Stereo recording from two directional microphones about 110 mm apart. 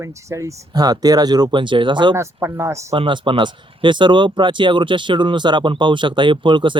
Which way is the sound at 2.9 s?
50° right (ahead or behind).